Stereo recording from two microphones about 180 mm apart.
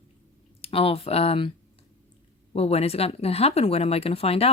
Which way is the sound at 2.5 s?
35° left (ahead or behind).